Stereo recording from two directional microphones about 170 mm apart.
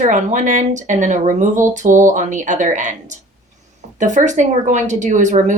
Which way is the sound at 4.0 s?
45° right (ahead or behind).